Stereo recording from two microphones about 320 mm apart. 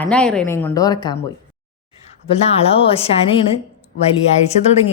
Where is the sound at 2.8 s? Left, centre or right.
Centre.